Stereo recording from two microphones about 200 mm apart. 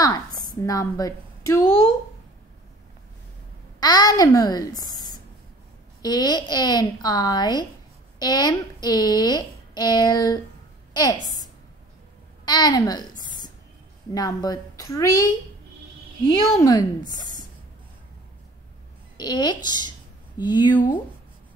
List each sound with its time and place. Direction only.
0.0 s a sound: 20° left (ahead or behind)
0.6 s a woman's voice: 15° left (ahead or behind)
3.8 s a child's voice: 20° left (ahead or behind)
12.4 s a woman's voice: 20° left (ahead or behind)
16.3 s a woman's voice: 20° left (ahead or behind)
19.1 s speech: 20° left (ahead or behind)